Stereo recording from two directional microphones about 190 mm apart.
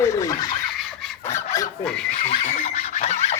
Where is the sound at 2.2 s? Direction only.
40° left (ahead or behind).